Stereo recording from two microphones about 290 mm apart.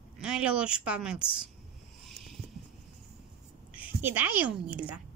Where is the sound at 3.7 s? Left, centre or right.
Centre.